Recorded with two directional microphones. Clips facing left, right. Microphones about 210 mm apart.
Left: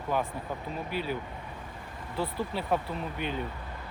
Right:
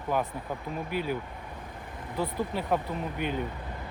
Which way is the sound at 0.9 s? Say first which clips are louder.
Right 2 dB; 50° right (ahead or behind).